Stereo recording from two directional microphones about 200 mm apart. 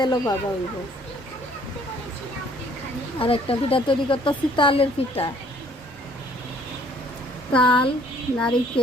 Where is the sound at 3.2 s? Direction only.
25° left (ahead or behind).